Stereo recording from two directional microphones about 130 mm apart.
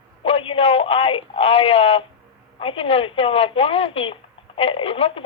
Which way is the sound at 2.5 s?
45° left (ahead or behind).